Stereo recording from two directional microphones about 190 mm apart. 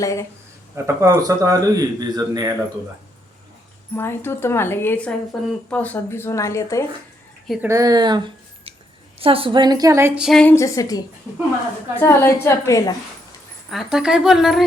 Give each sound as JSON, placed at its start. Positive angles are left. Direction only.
{"t": 0.0, "sound": "a woman's voice", "side_deg": 15}
{"t": 0.9, "sound": "speech", "side_deg": -15}
{"t": 3.9, "sound": "a woman's voice", "side_deg": 10}
{"t": 7.4, "sound": "a woman's voice", "side_deg": 0}
{"t": 7.7, "sound": "speech", "side_deg": -20}
{"t": 10.2, "sound": "speech", "side_deg": 0}
{"t": 10.5, "sound": "a woman's voice", "side_deg": 15}
{"t": 13.7, "sound": "speech", "side_deg": 0}